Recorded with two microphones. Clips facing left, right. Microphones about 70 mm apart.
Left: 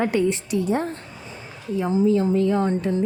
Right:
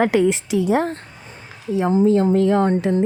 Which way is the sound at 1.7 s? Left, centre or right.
Right.